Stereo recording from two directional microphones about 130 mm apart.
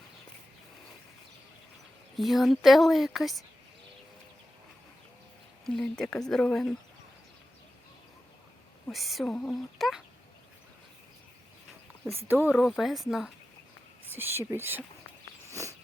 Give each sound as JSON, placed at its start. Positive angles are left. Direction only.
{"t": 2.1, "sound": "speech", "side_deg": 0}
{"t": 5.6, "sound": "speech", "side_deg": 5}
{"t": 8.9, "sound": "speech", "side_deg": 0}
{"t": 12.3, "sound": "speech", "side_deg": -15}
{"t": 12.5, "sound": "speech", "side_deg": 0}
{"t": 14.1, "sound": "speech", "side_deg": -15}
{"t": 15.4, "sound": "a sound", "side_deg": -25}